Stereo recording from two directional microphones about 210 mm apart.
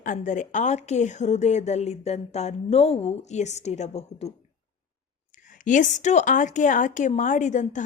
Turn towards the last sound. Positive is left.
turn(degrees=35)  # may be behind; listen again after turning